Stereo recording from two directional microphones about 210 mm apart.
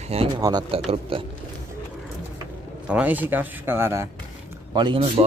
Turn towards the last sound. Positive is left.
turn(degrees=-25)  # may be behind; listen again after turning